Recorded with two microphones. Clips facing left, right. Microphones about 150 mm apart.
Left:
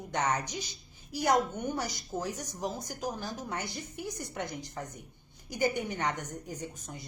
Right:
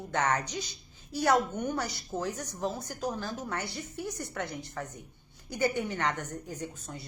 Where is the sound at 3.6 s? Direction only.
65° right (ahead or behind).